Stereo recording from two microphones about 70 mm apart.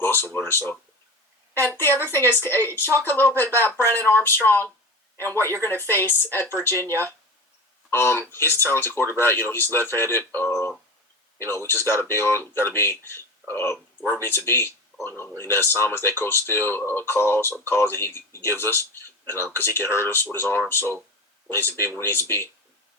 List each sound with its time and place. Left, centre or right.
0.0 s speech: left
7.9 s speech: left